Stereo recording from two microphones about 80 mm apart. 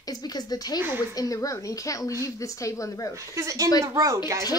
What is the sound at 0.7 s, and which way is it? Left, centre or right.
Speech, right.